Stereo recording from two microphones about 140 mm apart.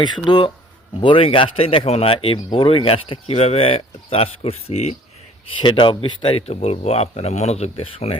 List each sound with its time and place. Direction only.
0.0 s speech: 30° left (ahead or behind); by 4.9 s 50° left (ahead or behind)
5.5 s speech: 35° left (ahead or behind)